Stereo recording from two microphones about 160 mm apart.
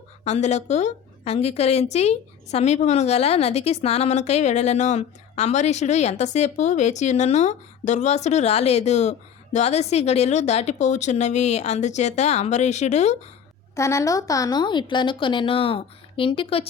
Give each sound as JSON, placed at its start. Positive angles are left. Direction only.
{"t": 0.3, "sound": "a woman's voice", "side_deg": 45}
{"t": 13.7, "sound": "a woman's voice", "side_deg": 20}